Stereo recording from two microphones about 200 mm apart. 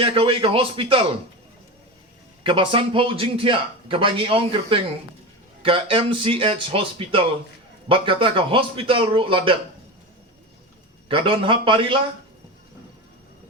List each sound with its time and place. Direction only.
0.0 s a man's voice: 25° right (ahead or behind)
2.4 s a man's voice: 25° right (ahead or behind)
11.1 s a man's voice: 25° right (ahead or behind)